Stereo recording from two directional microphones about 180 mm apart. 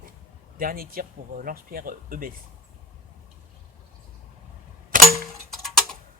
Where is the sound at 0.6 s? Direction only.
50° right (ahead or behind).